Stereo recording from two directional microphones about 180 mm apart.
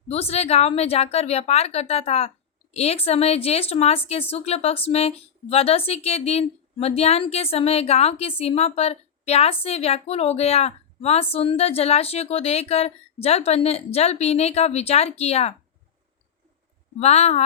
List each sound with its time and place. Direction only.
0.1 s speech: 35° left (ahead or behind)
17.0 s speech: 35° left (ahead or behind)